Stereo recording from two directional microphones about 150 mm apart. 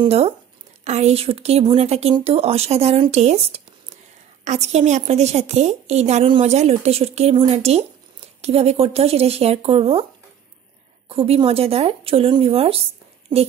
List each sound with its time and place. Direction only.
0.0 s a woman's voice: 45° right (ahead or behind)
11.1 s a woman's voice: 40° right (ahead or behind)